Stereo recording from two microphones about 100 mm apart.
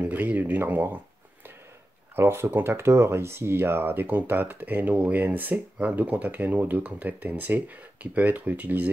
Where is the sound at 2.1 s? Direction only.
25° right (ahead or behind).